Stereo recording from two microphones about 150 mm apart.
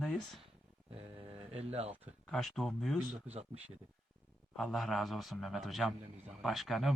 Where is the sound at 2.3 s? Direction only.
Centre (ahead or behind).